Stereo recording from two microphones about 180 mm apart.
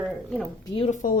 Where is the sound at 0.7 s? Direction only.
40° left (ahead or behind).